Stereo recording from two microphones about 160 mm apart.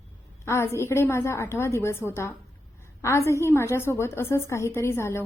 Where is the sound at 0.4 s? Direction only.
15° left (ahead or behind).